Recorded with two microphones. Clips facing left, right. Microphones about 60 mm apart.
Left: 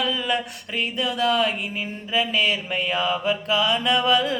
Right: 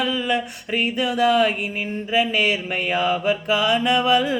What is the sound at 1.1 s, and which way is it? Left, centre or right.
Music, centre.